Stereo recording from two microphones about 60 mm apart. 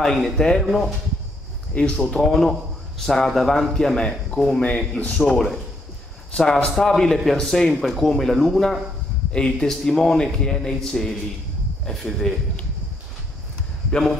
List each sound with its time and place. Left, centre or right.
0.0 s a man's voice: centre
1.7 s a man's voice: centre
2.1 s a man's voice: centre
9.3 s a man's voice: centre